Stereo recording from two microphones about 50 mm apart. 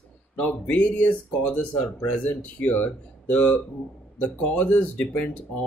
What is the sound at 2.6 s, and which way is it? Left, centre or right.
Speech, left.